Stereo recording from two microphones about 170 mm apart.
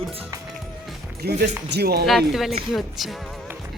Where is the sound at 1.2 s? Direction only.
75° right (ahead or behind).